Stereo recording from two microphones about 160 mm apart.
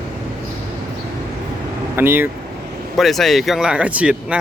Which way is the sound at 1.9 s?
15° right (ahead or behind).